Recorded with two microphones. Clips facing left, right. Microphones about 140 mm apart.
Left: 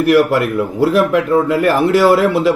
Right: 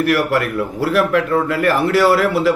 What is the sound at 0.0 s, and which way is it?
A man's voice, 20° left (ahead or behind).